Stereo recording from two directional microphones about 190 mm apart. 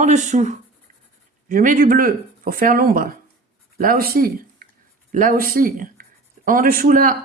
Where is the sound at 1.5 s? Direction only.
45° right (ahead or behind).